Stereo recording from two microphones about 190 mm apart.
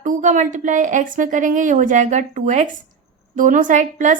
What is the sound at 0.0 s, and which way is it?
A woman's voice, 40° right (ahead or behind).